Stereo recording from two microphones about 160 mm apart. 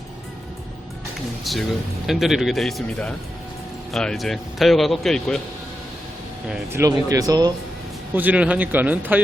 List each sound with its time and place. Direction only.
1.5 s speech: centre (ahead or behind)
6.7 s speech: 20° right (ahead or behind)
8.1 s speech: 10° right (ahead or behind)